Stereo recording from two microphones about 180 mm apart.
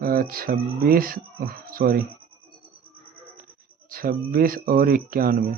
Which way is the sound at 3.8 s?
55° right (ahead or behind).